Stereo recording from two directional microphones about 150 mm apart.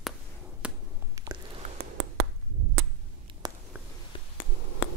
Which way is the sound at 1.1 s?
25° right (ahead or behind).